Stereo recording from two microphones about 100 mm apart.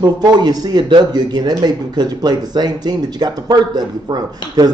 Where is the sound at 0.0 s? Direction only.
45° right (ahead or behind).